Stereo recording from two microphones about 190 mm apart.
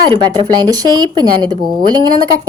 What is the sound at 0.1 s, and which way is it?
A woman's voice, 25° right (ahead or behind).